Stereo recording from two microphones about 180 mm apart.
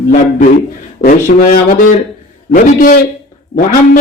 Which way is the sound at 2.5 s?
50° left (ahead or behind).